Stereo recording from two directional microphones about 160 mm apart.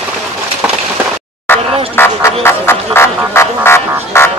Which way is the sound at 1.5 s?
15° left (ahead or behind).